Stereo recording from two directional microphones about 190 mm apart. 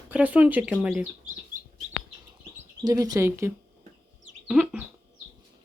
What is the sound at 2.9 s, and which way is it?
Speech, 20° right (ahead or behind).